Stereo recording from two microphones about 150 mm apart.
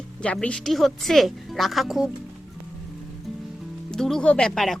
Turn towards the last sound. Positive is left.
turn(degrees=5)  # may be behind; listen again after turning